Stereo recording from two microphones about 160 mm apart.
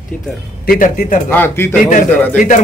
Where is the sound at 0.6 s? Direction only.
60° left (ahead or behind).